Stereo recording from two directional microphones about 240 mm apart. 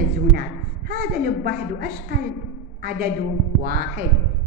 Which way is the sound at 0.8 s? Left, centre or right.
Right.